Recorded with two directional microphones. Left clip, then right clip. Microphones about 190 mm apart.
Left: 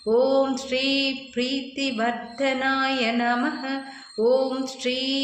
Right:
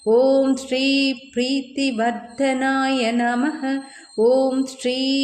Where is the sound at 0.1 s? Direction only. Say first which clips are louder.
Right 4 dB; 45° right (ahead or behind).